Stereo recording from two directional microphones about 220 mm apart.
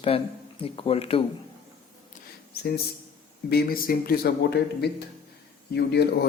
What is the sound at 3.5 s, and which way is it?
Speech, 45° left (ahead or behind).